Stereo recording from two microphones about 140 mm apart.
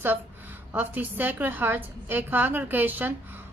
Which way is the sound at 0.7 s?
10° right (ahead or behind).